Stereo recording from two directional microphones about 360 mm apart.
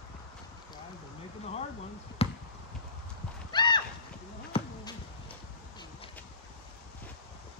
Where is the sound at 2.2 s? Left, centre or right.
Centre.